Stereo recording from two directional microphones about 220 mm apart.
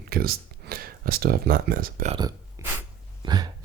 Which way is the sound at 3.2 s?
20° right (ahead or behind).